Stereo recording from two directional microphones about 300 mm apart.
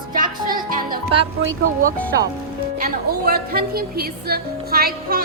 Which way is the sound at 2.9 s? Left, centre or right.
Right.